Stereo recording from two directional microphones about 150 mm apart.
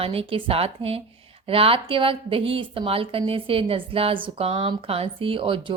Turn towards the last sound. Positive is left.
turn(degrees=-35)  # may be behind; listen again after turning